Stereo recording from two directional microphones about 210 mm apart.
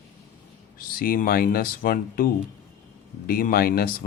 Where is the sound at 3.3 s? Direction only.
40° left (ahead or behind).